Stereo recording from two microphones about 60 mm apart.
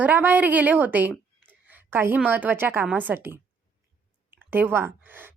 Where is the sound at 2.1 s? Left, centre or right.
Right.